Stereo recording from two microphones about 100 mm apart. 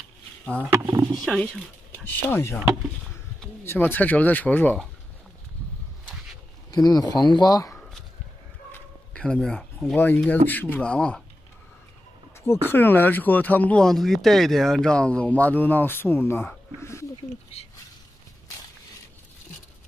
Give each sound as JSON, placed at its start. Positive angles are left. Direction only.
{"t": 1.3, "sound": "speech", "side_deg": 5}
{"t": 2.0, "sound": "speech", "side_deg": 20}
{"t": 3.6, "sound": "speech", "side_deg": 20}
{"t": 6.7, "sound": "speech", "side_deg": 40}
{"t": 9.1, "sound": "speech", "side_deg": 10}
{"t": 9.9, "sound": "speech", "side_deg": 20}
{"t": 12.4, "sound": "speech", "side_deg": 20}
{"t": 13.8, "sound": "speech", "side_deg": 0}